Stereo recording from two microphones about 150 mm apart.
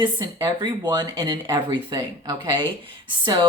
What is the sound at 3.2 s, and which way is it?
Speech, 30° right (ahead or behind).